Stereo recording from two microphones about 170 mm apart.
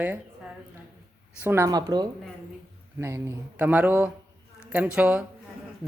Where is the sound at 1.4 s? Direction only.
15° right (ahead or behind).